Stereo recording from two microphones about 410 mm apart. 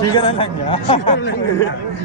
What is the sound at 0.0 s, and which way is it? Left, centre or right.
Speech, centre.